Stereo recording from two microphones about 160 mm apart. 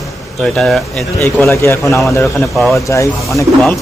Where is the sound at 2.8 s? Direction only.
20° left (ahead or behind).